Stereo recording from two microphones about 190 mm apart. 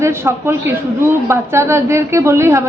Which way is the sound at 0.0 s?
15° right (ahead or behind).